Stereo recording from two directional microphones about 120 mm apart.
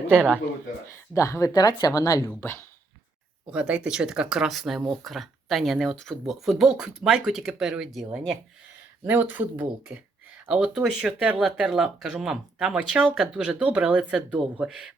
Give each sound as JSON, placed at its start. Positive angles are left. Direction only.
{"t": 1.1, "sound": "speech", "side_deg": 25}
{"t": 2.4, "sound": "speech", "side_deg": 20}
{"t": 3.5, "sound": "speech", "side_deg": -10}
{"t": 9.0, "sound": "speech", "side_deg": -15}